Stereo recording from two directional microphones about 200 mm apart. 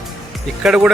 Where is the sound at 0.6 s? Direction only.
5° right (ahead or behind).